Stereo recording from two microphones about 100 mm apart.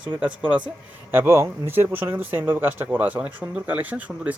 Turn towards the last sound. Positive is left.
turn(degrees=-15)  # may be behind; listen again after turning